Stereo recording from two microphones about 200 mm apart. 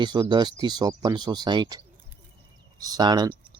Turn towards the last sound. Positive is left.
turn(degrees=-20)  # may be behind; listen again after turning